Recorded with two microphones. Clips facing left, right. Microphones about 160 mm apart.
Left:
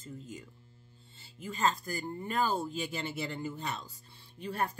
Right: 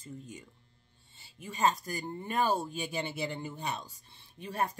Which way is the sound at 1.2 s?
15° right (ahead or behind).